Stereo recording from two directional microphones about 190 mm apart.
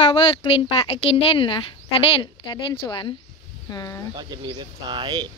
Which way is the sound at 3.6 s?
20° left (ahead or behind).